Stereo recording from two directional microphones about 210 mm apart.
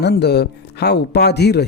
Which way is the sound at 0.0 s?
50° left (ahead or behind).